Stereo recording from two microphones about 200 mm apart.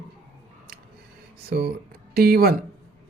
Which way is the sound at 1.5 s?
55° right (ahead or behind).